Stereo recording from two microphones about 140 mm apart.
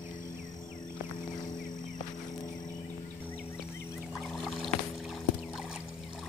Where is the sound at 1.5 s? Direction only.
70° left (ahead or behind).